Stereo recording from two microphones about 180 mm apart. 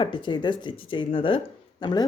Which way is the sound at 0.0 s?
25° left (ahead or behind).